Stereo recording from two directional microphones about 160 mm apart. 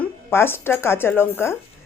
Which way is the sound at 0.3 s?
15° left (ahead or behind).